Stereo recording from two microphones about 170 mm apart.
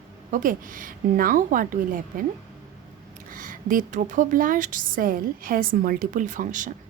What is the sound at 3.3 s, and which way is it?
A woman's voice, 55° right (ahead or behind).